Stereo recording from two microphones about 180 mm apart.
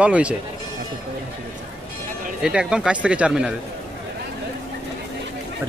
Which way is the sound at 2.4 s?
5° right (ahead or behind).